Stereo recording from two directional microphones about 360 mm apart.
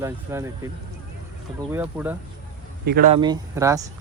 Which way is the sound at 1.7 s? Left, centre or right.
Centre.